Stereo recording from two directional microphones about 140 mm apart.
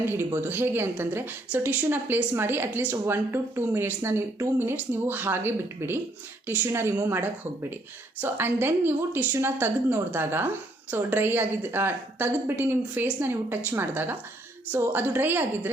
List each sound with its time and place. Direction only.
0.0 s a woman's voice: 15° right (ahead or behind)